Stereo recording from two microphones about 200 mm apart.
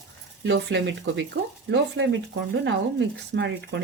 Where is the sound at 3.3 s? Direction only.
60° right (ahead or behind).